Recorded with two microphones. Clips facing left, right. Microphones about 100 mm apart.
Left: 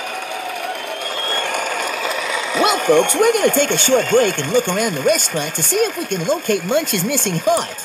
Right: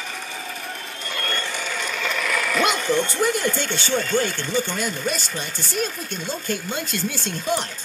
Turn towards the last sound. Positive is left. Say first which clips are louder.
# left 8 dB
turn(degrees=60)  # may be behind; listen again after turning